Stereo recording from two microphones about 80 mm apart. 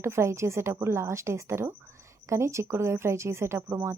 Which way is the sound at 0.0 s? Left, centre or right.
Right.